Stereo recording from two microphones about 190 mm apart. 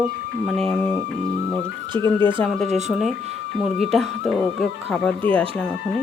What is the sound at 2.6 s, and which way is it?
Speech, 35° right (ahead or behind).